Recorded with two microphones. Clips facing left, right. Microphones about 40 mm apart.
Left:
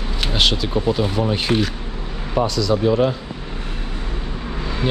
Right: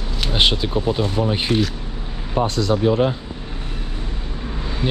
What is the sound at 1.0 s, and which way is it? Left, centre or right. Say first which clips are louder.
Speech: left 1 dB; centre.